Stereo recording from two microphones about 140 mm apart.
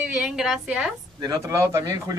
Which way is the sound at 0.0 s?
5° right (ahead or behind).